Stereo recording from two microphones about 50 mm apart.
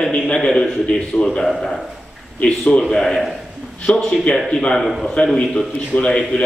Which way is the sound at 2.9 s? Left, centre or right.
Centre.